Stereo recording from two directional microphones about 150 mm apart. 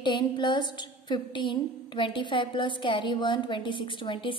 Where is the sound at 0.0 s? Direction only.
30° left (ahead or behind).